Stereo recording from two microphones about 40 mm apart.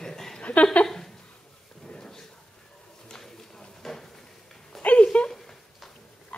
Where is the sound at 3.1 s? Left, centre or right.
Centre.